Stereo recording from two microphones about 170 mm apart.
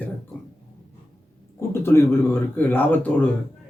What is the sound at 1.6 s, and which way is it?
Speech, 15° left (ahead or behind).